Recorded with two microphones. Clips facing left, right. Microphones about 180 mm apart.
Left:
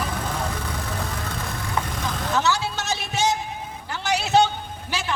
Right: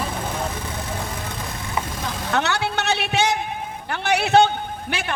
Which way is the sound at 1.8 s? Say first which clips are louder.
Even; 10° right (ahead or behind).